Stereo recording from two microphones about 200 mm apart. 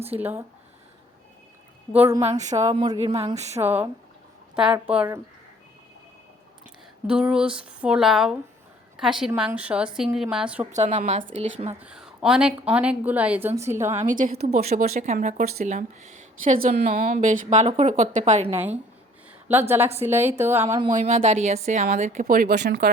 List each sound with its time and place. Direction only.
0.2 s a woman's voice: 10° right (ahead or behind)
1.9 s a woman's voice: 10° right (ahead or behind)
2.4 s a woman's voice: 35° right (ahead or behind)
2.6 s speech: 20° right (ahead or behind)
3.1 s a woman's voice: 30° right (ahead or behind)
3.5 s a woman's voice: 10° right (ahead or behind)
7.1 s speech: 5° right (ahead or behind)
10.7 s a woman's voice: 35° right (ahead or behind)
11.7 s a woman's voice: 5° right (ahead or behind)
13.9 s a woman's voice: 35° right (ahead or behind)
18.5 s a woman's voice: 10° right (ahead or behind)
20.7 s a woman's voice: 25° right (ahead or behind); by 22.9 s 55° right (ahead or behind)